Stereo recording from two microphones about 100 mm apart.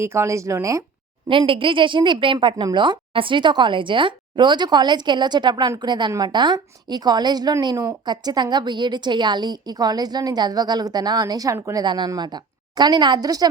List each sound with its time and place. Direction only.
0.0 s speech: 25° right (ahead or behind)
1.3 s a woman's voice: 60° right (ahead or behind); by 11.9 s 35° right (ahead or behind)
11.9 s a woman's voice: 45° right (ahead or behind)